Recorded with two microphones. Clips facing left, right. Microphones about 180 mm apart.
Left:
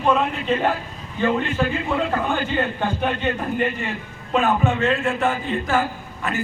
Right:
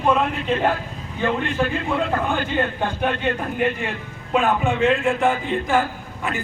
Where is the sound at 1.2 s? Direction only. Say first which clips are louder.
Left 2 dB; 10° right (ahead or behind).